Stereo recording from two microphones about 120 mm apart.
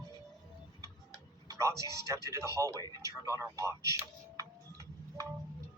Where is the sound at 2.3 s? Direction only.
25° right (ahead or behind).